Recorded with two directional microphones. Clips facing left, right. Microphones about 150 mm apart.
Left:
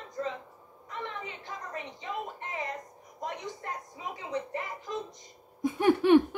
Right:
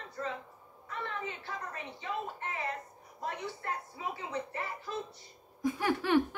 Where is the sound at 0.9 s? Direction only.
15° left (ahead or behind).